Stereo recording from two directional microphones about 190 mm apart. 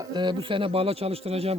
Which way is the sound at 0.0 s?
20° right (ahead or behind).